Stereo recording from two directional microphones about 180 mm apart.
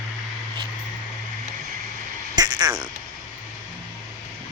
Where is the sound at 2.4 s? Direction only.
25° right (ahead or behind).